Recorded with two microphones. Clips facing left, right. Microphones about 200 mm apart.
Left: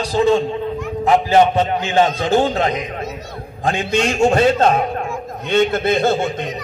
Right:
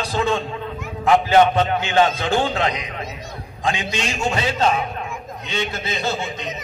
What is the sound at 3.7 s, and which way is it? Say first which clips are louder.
A man's voice: left 6 dB; 55° left (ahead or behind).